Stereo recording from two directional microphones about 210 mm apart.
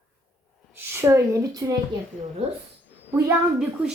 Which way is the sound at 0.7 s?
10° right (ahead or behind).